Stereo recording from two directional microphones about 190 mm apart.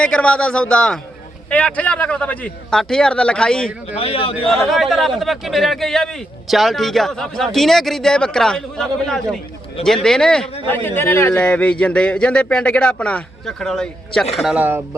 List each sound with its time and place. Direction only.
0.0 s a man's voice: 5° left (ahead or behind)
3.9 s a man's voice: 30° left (ahead or behind)
4.4 s a man's voice: centre (ahead or behind)